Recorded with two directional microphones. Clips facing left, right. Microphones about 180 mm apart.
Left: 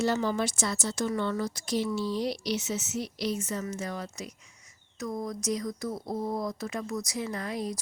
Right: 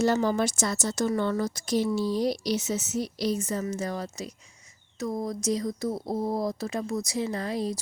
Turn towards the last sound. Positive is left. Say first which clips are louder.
# right 4 dB
turn(degrees=-30)  # may be behind; listen again after turning